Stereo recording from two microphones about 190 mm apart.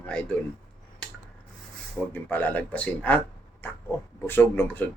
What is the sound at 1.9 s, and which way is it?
Speech, 10° left (ahead or behind).